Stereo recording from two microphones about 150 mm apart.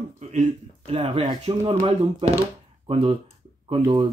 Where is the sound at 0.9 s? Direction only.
40° right (ahead or behind).